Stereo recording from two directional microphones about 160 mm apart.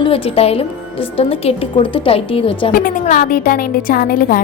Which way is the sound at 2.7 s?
60° left (ahead or behind).